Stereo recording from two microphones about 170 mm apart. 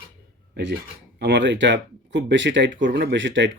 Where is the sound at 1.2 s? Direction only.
90° right.